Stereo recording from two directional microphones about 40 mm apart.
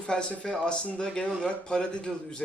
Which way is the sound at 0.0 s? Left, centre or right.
Left.